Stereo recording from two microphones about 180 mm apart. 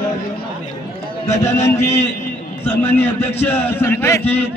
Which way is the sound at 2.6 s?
10° left (ahead or behind).